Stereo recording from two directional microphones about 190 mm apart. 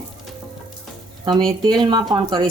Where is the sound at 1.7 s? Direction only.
25° right (ahead or behind).